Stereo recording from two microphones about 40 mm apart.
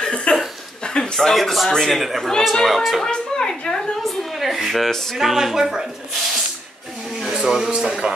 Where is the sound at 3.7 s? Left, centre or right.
Centre.